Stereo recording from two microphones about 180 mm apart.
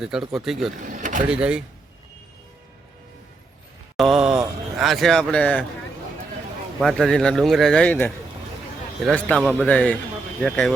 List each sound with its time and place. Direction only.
0.0 s speech: 5° right (ahead or behind)
0.8 s speech: 45° right (ahead or behind)
1.3 s speech: 5° right (ahead or behind)
3.9 s speech: centre (ahead or behind)
6.7 s a man's voice: centre (ahead or behind)